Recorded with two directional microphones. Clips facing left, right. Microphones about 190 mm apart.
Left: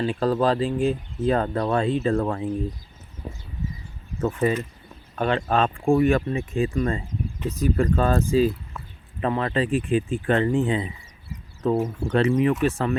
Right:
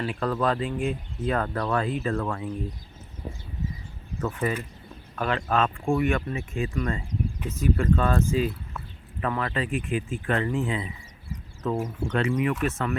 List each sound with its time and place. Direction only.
0.0 s speech: 30° left (ahead or behind)
4.2 s speech: 25° left (ahead or behind)